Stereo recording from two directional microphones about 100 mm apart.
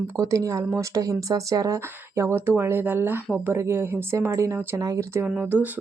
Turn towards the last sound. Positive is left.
turn(degrees=-15)  # may be behind; listen again after turning